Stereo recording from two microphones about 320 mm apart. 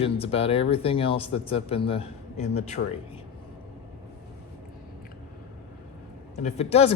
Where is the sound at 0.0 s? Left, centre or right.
Centre.